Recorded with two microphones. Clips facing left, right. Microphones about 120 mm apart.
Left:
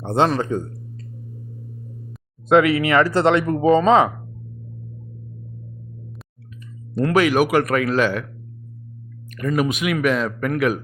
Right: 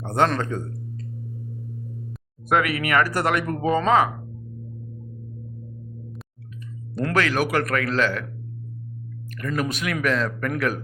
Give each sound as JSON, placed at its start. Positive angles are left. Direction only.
{"t": 0.0, "sound": "a sound", "side_deg": 20}
{"t": 0.3, "sound": "speech", "side_deg": 15}
{"t": 2.5, "sound": "speech", "side_deg": 20}
{"t": 7.1, "sound": "speech", "side_deg": 15}
{"t": 9.4, "sound": "speech", "side_deg": 15}